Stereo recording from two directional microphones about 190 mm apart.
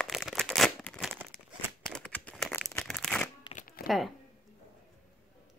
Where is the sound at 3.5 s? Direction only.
50° left (ahead or behind).